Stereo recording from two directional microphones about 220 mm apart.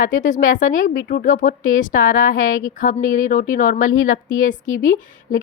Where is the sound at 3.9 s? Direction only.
65° left (ahead or behind).